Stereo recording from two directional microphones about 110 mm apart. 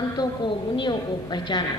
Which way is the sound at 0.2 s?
45° left (ahead or behind).